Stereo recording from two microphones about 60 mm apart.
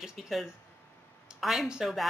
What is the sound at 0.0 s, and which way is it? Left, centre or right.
A woman's voice, centre.